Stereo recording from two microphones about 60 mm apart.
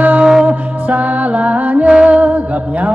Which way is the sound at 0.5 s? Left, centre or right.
Right.